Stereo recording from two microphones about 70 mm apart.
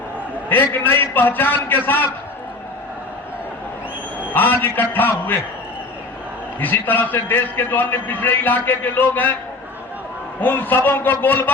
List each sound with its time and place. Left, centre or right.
0.4 s a man's voice: left
4.4 s a man's voice: left
6.6 s a man's voice: left
10.4 s a man's voice: left